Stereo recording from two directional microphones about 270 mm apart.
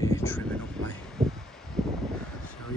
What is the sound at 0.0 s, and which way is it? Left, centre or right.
Crow, centre.